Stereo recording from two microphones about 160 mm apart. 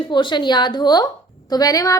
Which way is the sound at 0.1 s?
30° left (ahead or behind).